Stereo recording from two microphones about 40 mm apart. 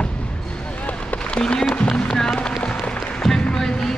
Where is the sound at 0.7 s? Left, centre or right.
Left.